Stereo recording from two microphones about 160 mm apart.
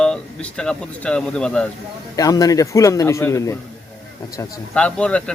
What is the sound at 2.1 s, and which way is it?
A man's voice, 25° left (ahead or behind).